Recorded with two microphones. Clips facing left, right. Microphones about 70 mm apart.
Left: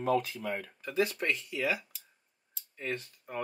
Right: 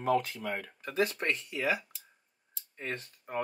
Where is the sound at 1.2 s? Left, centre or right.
Right.